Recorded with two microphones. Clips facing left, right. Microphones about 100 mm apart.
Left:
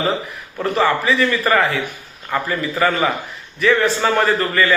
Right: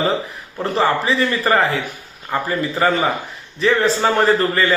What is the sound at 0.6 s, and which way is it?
A man's voice, 30° right (ahead or behind).